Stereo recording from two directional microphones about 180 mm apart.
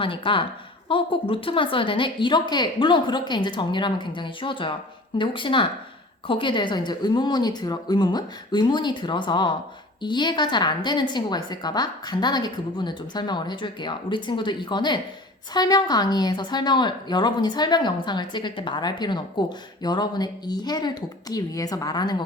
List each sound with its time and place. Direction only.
0.0 s a woman's voice: 30° left (ahead or behind)